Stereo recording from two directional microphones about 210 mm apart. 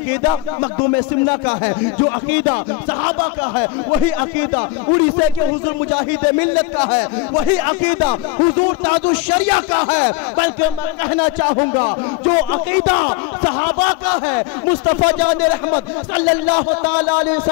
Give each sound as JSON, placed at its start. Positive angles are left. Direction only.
{"t": 0.9, "sound": "a man's voice", "side_deg": 15}